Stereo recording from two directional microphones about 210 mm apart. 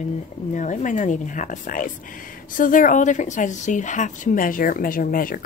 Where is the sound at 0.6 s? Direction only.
35° left (ahead or behind).